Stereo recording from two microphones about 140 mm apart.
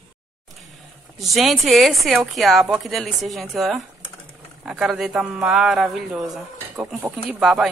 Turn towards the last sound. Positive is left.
turn(degrees=0)  # may be behind; listen again after turning